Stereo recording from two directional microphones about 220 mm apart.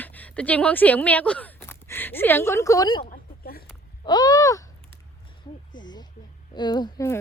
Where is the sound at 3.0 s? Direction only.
40° left (ahead or behind).